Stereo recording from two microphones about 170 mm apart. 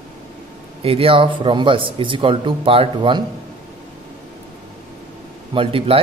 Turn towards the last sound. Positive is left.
turn(degrees=-35)  # may be behind; listen again after turning